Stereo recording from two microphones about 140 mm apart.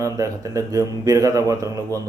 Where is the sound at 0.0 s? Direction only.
25° right (ahead or behind).